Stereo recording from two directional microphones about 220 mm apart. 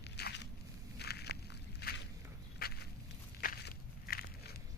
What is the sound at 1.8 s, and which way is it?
Walk, 45° left (ahead or behind).